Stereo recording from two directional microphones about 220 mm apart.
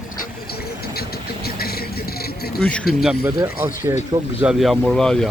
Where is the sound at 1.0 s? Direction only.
45° left (ahead or behind).